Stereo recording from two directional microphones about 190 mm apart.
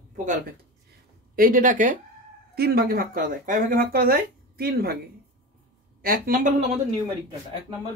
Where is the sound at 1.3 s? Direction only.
45° right (ahead or behind).